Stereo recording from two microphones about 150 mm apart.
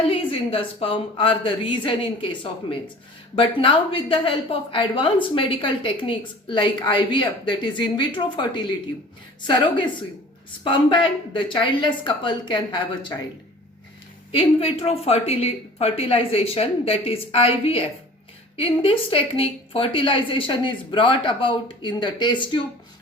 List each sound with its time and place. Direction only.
0.1 s a woman's voice: 35° left (ahead or behind)
10.6 s a woman's voice: 35° left (ahead or behind)
14.3 s a woman's voice: 40° left (ahead or behind)